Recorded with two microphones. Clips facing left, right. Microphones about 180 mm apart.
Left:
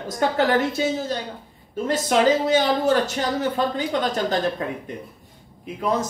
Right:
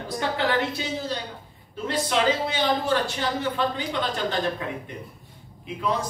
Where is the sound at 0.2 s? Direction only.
45° left (ahead or behind).